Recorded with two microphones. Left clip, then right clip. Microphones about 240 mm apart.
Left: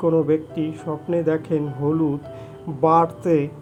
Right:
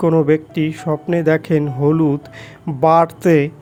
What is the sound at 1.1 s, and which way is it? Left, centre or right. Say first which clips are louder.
A man's voice: right 5 dB; right.